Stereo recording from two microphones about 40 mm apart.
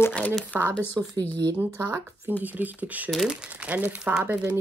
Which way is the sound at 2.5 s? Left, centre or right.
Right.